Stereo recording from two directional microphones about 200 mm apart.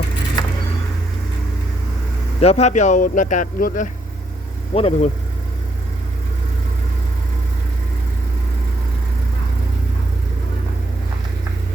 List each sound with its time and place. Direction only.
2.4 s speech: 35° left (ahead or behind)